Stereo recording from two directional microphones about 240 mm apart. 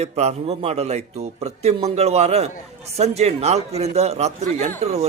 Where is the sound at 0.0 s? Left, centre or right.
Right.